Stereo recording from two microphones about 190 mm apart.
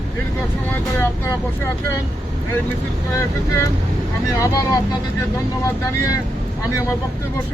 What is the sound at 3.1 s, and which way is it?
Speech, 15° left (ahead or behind).